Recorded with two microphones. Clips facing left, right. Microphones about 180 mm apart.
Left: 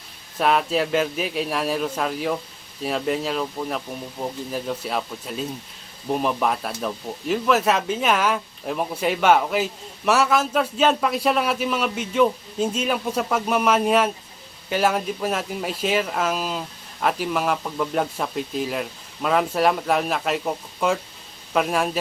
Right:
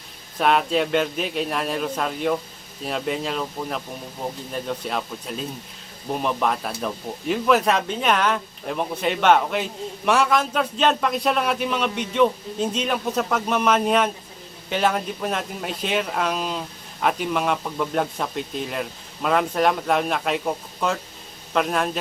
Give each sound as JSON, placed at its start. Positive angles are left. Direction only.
{"t": 0.3, "sound": "speech", "side_deg": 0}